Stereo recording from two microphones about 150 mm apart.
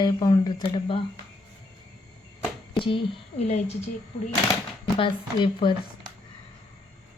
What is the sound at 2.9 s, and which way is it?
Speech, 35° left (ahead or behind).